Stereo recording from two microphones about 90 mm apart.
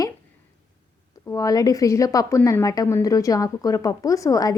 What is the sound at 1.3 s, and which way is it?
A woman's voice, 40° left (ahead or behind).